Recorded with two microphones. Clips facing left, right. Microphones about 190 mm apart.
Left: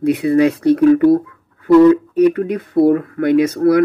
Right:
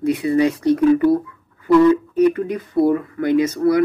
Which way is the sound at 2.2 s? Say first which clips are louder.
Left 3 dB; 65° left (ahead or behind).